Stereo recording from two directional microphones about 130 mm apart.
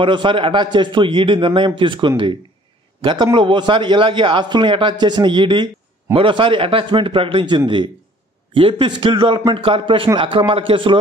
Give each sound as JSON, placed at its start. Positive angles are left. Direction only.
{"t": 0.0, "sound": "a man's voice", "side_deg": -40}